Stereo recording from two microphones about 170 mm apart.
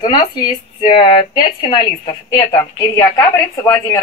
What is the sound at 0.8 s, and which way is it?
A woman's voice, 30° left (ahead or behind).